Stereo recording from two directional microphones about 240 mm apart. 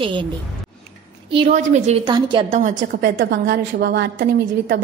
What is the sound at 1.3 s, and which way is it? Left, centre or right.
A woman's voice, right.